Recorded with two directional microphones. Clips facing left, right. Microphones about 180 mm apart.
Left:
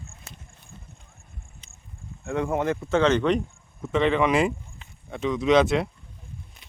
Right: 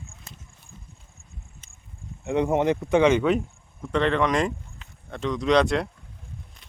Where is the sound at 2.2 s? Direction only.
20° right (ahead or behind); by 5.9 s centre (ahead or behind).